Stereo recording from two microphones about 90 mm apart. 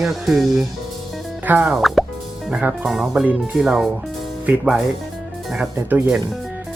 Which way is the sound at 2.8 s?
5° right (ahead or behind).